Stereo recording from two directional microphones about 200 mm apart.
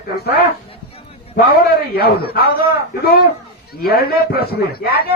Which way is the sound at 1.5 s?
50° left (ahead or behind).